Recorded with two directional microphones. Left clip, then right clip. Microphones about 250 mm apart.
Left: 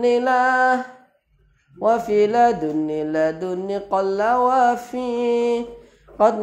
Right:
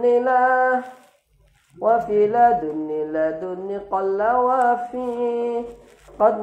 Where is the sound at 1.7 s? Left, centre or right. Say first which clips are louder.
Even; left.